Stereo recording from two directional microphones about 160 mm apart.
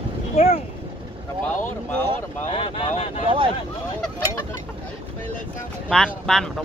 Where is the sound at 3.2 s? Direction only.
35° right (ahead or behind).